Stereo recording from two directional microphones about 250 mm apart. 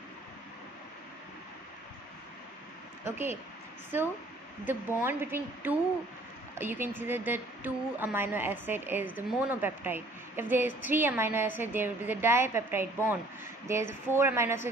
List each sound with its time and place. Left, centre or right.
3.1 s a woman's voice: centre
4.6 s a woman's voice: centre